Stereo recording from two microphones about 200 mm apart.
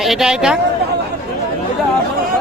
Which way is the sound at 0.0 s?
Centre (ahead or behind).